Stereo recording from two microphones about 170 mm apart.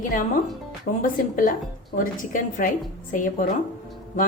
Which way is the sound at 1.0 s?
50° left (ahead or behind).